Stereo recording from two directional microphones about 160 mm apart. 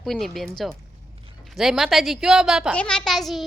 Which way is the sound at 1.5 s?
5° right (ahead or behind).